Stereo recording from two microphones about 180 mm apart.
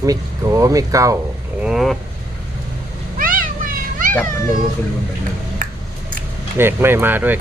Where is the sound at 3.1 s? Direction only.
50° right (ahead or behind).